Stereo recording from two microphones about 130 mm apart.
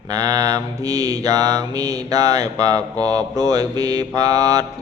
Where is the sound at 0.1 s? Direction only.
25° right (ahead or behind).